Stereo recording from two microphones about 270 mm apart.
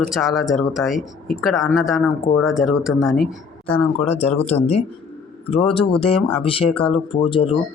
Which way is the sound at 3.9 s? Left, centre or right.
Left.